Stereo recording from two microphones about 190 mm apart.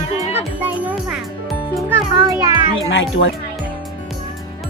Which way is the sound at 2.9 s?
75° left (ahead or behind).